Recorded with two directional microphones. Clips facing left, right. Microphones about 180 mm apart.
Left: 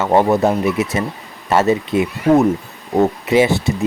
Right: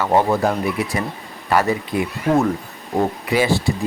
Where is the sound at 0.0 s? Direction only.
20° left (ahead or behind).